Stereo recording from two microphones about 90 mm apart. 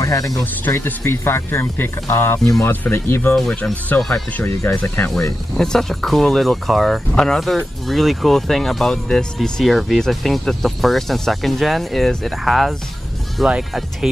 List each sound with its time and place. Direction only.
0.0 s speech: 40° left (ahead or behind)
0.7 s speech: 25° left (ahead or behind)
3.3 s speech: 5° left (ahead or behind)
4.1 s speech: 15° left (ahead or behind)
5.6 s speech: 5° left (ahead or behind)